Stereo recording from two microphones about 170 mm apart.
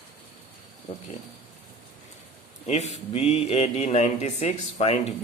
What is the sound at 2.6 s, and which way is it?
Speech, 40° left (ahead or behind).